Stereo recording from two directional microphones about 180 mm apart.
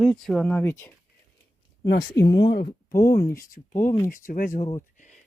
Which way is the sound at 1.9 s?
60° left (ahead or behind).